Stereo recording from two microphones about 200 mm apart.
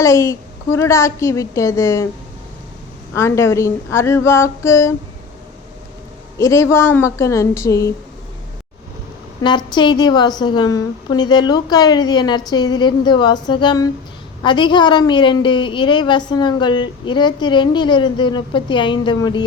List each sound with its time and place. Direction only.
0.0 s a woman's voice: 15° left (ahead or behind)
3.2 s a woman's voice: 15° left (ahead or behind)
6.4 s a woman's voice: 15° left (ahead or behind)
9.4 s a woman's voice: 20° left (ahead or behind)